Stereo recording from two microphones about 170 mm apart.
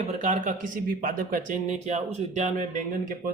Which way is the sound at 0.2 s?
45° right (ahead or behind).